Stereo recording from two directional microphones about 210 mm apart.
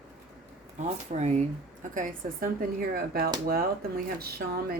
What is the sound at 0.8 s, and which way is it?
A woman's voice, 30° right (ahead or behind).